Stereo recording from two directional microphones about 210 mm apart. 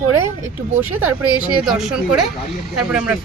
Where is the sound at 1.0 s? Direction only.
90° right.